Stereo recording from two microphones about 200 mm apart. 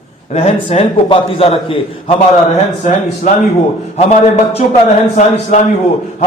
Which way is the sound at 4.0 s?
35° left (ahead or behind).